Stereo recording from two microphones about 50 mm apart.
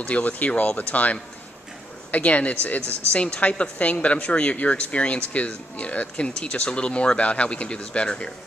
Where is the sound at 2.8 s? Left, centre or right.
Right.